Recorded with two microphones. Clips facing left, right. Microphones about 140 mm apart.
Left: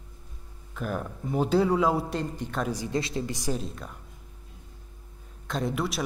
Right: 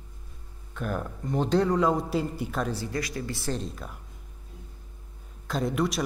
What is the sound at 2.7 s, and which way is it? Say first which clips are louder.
Speech: left 2 dB; 20° left (ahead or behind).